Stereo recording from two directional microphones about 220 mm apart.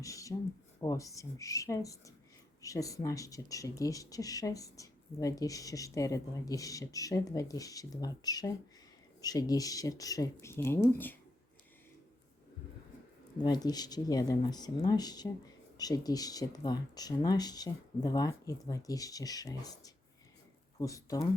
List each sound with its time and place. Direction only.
0.0 s speech: 15° left (ahead or behind)
13.4 s speech: 20° left (ahead or behind)